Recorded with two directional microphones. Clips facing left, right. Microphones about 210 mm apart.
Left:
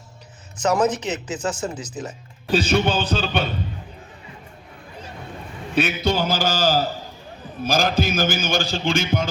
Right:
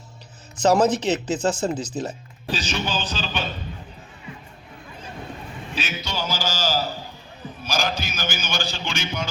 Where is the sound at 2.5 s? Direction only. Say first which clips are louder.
Left 8 dB; 55° left (ahead or behind).